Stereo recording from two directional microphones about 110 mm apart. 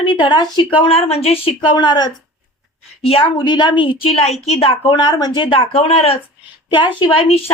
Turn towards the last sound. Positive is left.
turn(degrees=55)  # may be behind; listen again after turning